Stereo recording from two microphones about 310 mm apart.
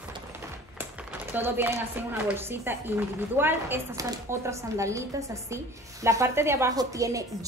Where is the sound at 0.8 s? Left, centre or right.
Centre.